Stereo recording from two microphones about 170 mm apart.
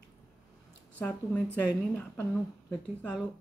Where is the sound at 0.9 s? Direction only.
10° left (ahead or behind).